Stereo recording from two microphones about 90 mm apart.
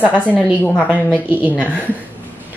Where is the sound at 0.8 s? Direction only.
20° right (ahead or behind).